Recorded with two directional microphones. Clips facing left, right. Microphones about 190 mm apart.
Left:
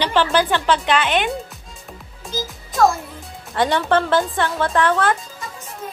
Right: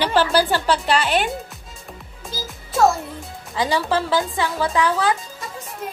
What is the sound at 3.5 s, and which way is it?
Speech, centre (ahead or behind).